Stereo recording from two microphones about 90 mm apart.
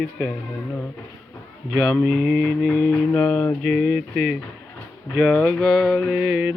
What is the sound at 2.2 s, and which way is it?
Mantra, 10° right (ahead or behind).